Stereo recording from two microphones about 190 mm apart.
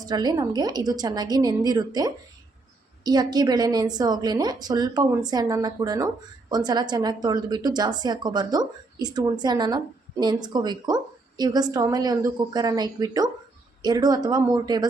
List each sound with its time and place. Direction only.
0.0 s a woman's voice: 20° right (ahead or behind)